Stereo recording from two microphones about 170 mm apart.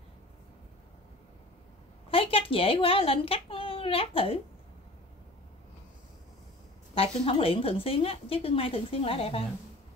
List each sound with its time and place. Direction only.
2.0 s speech: 35° left (ahead or behind)
7.0 s a woman's voice: 35° left (ahead or behind)